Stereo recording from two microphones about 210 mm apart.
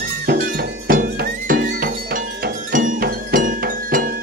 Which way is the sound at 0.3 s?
45° right (ahead or behind).